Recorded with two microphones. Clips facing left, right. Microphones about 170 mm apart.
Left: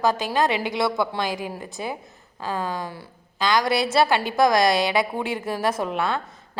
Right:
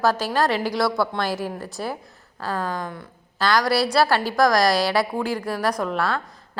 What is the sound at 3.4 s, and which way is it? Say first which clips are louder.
A woman's voice: right 1 dB; 20° left (ahead or behind).